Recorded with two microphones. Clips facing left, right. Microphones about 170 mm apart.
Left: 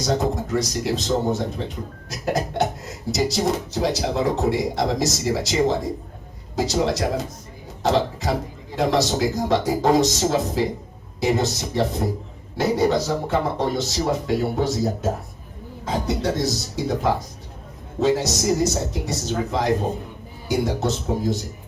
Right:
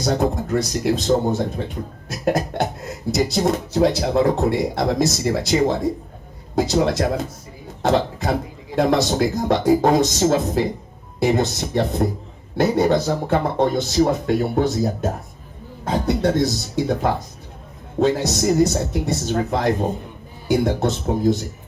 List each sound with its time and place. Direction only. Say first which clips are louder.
0.0 s speech: right 2 dB; 55° right (ahead or behind)